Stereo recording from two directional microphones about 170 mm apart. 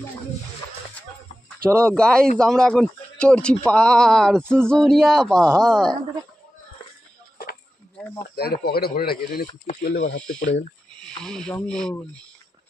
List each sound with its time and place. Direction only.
1.7 s a sound: 15° right (ahead or behind)
2.0 s a man's voice: 5° left (ahead or behind)
4.4 s a sound: 15° right (ahead or behind)
4.6 s a man's voice: 5° left (ahead or behind)
8.4 s speech: 65° left (ahead or behind)
11.1 s a man's voice: 5° left (ahead or behind)